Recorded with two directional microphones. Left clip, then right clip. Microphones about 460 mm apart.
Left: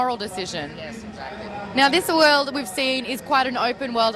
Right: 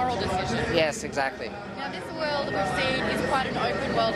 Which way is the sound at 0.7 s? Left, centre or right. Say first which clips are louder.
Right 11 dB; right.